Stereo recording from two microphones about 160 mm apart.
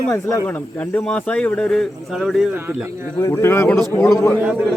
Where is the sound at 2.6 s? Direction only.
10° right (ahead or behind).